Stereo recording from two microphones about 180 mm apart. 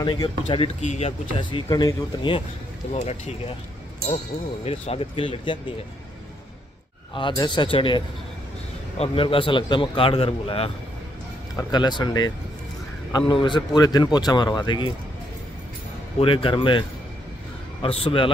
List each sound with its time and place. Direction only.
0.0 s a man's voice: 25° left (ahead or behind)
0.7 s speech: 40° left (ahead or behind)
1.4 s a man's voice: 25° left (ahead or behind)
2.9 s speech: 35° left (ahead or behind)
4.6 s speech: 35° left (ahead or behind)
7.2 s a man's voice: 25° left (ahead or behind)
13.3 s a man's voice: 25° left (ahead or behind)
16.2 s a man's voice: 30° left (ahead or behind)
17.8 s speech: 30° left (ahead or behind)